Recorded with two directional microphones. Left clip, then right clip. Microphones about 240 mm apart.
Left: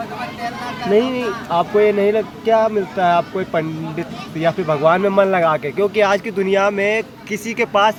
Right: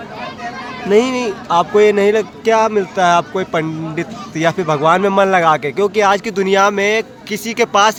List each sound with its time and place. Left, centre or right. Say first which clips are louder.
0.9 s speech: right 3 dB; centre